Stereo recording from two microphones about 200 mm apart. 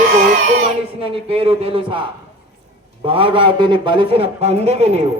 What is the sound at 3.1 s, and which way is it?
A man's voice, 25° right (ahead or behind).